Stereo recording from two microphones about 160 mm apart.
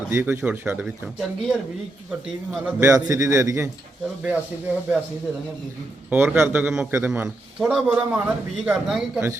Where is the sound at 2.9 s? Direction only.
20° right (ahead or behind).